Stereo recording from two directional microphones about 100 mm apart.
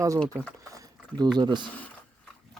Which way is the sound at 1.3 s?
45° right (ahead or behind).